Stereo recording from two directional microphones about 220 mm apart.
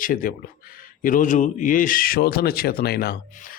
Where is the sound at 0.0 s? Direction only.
40° left (ahead or behind).